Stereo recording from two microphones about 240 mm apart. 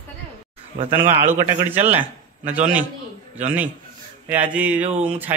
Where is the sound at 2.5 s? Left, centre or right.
Centre.